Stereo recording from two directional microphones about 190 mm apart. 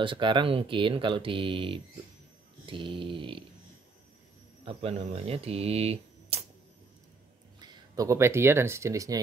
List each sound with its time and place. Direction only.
0.0 s speech: 25° right (ahead or behind)
4.6 s speech: 30° right (ahead or behind)
7.6 s speech: 20° right (ahead or behind)